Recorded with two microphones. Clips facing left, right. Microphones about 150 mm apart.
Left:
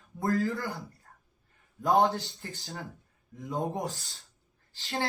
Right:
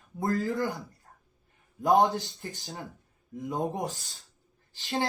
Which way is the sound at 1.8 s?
20° right (ahead or behind).